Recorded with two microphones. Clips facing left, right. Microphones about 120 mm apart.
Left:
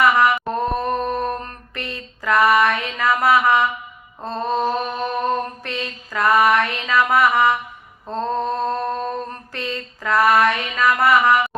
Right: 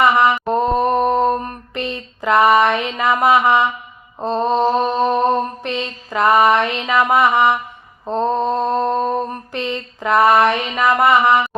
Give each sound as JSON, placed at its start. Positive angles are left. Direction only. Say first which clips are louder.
{"t": 0.0, "sound": "mantra", "louder": "right 2 dB", "side_deg": -25}